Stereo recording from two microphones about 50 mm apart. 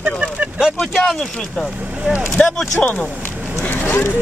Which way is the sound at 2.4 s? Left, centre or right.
Centre.